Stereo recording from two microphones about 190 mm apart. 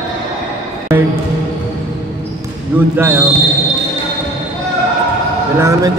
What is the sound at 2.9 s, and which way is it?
Speech, 10° right (ahead or behind).